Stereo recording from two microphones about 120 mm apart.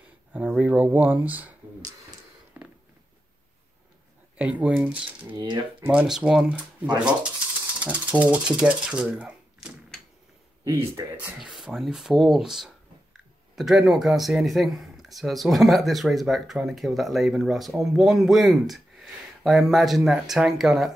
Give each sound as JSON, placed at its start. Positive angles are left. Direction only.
{"t": 0.3, "sound": "speech", "side_deg": -15}
{"t": 2.6, "sound": "a sound", "side_deg": -15}
{"t": 4.4, "sound": "speech", "side_deg": -10}
{"t": 5.4, "sound": "speech", "side_deg": -45}
{"t": 5.9, "sound": "speech", "side_deg": -10}
{"t": 11.0, "sound": "speech", "side_deg": -30}
{"t": 11.3, "sound": "speech", "side_deg": -5}